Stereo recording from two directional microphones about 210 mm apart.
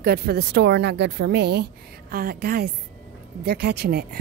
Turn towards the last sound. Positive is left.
turn(degrees=-50)  # may be behind; listen again after turning